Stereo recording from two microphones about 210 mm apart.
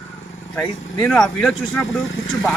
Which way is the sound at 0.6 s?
5° left (ahead or behind).